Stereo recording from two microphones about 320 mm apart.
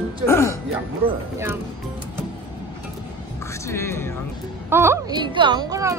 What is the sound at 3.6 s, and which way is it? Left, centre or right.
Speech, centre.